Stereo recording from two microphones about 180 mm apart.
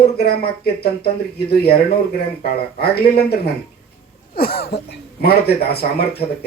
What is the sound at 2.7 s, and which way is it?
Speech, 60° left (ahead or behind).